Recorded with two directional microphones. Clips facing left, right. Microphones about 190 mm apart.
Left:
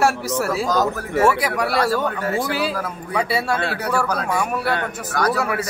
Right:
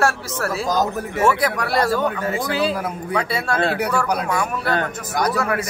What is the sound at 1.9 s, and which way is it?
Speech, 15° right (ahead or behind).